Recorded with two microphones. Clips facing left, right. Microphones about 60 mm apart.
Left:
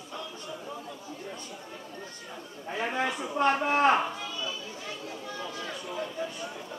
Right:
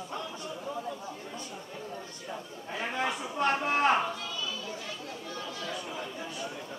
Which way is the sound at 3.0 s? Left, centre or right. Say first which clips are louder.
Left 3 dB; centre.